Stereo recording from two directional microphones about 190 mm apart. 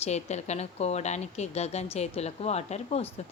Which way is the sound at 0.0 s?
35° left (ahead or behind).